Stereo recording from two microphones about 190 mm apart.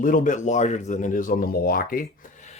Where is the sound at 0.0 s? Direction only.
45° left (ahead or behind).